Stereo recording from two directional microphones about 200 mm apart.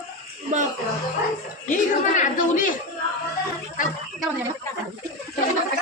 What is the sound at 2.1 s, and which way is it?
Chatter, 40° left (ahead or behind).